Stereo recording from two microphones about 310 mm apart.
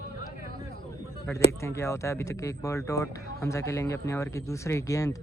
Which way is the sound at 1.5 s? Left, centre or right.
Centre.